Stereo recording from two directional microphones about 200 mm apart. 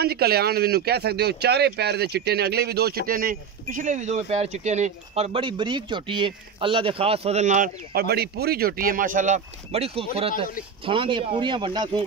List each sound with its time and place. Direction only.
0.0 s speech: 50° right (ahead or behind); by 12.0 s 20° right (ahead or behind)